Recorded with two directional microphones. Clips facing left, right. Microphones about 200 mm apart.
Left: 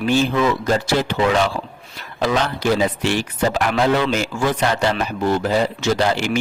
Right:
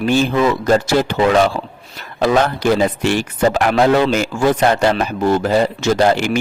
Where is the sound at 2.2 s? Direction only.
50° right (ahead or behind).